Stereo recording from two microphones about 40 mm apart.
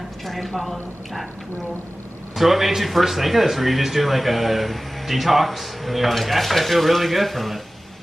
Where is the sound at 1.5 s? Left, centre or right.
Left.